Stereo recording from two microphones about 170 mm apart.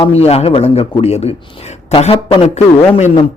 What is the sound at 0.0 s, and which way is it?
Speech, 35° left (ahead or behind).